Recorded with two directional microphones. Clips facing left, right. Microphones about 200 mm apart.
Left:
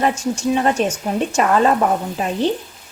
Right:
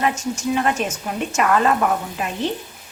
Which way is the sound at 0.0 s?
30° left (ahead or behind).